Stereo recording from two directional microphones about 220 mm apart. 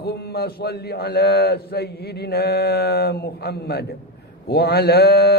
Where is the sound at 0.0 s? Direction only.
45° left (ahead or behind).